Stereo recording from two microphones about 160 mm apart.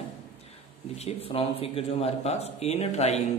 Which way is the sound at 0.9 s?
40° left (ahead or behind).